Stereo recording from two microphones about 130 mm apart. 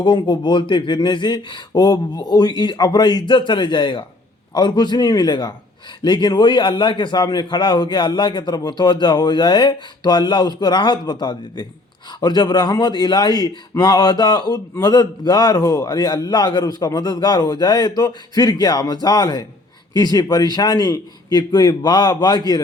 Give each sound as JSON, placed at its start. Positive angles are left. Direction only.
{"t": 0.0, "sound": "a man's voice", "side_deg": 35}